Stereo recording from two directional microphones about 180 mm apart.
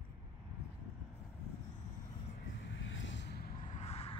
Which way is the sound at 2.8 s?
90° left.